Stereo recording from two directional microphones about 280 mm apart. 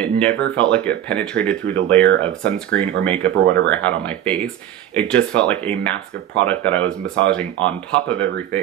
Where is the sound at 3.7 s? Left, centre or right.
Centre.